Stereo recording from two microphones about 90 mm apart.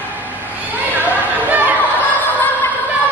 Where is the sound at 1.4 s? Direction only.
20° right (ahead or behind).